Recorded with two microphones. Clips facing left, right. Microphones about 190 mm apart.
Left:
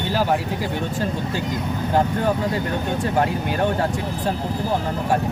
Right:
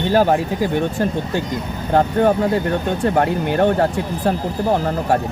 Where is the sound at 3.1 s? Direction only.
60° right (ahead or behind).